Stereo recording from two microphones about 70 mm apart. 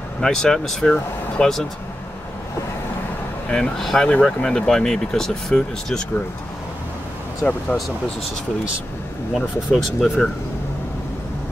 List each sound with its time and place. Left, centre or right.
0.2 s speech: centre
3.4 s speech: centre
7.4 s speech: centre
9.3 s speech: centre